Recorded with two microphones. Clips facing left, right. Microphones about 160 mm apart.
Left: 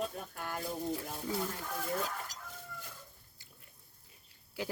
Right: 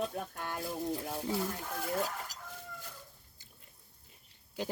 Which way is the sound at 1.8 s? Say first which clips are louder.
Right 2 dB; 5° right (ahead or behind).